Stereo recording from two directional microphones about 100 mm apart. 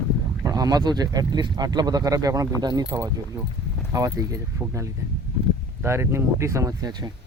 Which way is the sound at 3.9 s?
35° right (ahead or behind).